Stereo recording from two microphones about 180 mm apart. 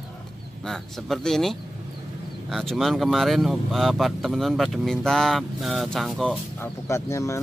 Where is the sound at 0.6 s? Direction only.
Centre (ahead or behind).